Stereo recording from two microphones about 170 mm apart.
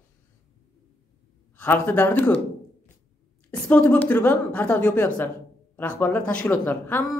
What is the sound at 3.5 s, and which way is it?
A woman's voice, 10° left (ahead or behind).